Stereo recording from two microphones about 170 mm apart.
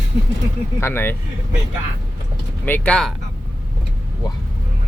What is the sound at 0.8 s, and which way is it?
Speech, 15° left (ahead or behind).